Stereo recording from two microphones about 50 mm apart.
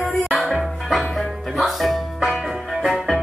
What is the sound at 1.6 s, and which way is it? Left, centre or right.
Music, centre.